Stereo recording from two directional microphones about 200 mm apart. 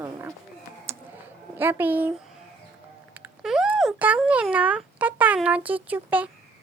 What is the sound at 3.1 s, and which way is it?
A child's voice, 5° right (ahead or behind).